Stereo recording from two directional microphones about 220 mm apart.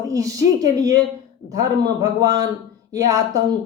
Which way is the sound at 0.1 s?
15° right (ahead or behind).